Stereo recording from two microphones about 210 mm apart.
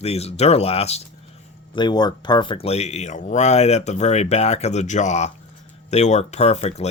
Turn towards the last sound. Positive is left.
turn(degrees=30)  # may be behind; listen again after turning